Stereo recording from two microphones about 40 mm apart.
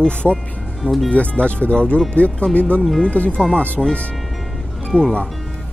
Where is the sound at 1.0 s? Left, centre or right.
Left.